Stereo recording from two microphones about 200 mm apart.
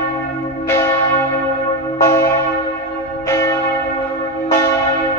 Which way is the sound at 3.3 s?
15° left (ahead or behind).